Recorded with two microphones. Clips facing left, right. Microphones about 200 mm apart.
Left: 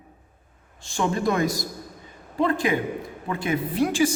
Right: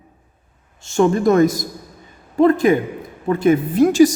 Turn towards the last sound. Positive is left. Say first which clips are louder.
# right 9 dB
turn(degrees=-40)  # may be behind; listen again after turning